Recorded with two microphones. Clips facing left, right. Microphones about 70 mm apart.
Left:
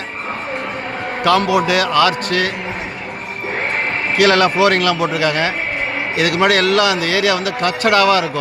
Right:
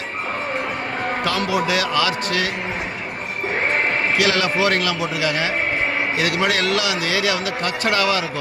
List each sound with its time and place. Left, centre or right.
1.5 s speech: left
4.2 s speech: left
6.1 s speech: left